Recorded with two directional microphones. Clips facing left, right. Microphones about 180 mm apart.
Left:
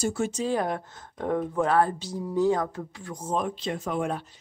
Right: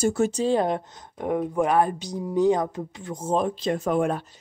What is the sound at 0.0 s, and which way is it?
Speech, 45° right (ahead or behind).